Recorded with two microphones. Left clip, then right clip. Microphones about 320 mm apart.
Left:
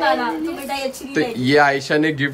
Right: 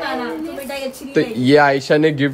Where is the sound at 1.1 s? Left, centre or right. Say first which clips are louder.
Right 3 dB; centre.